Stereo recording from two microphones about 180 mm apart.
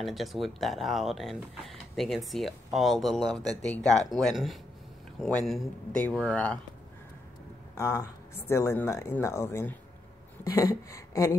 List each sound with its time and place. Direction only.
0.0 s speech: centre (ahead or behind)
7.7 s speech: 15° left (ahead or behind)
10.4 s a sound: 20° left (ahead or behind)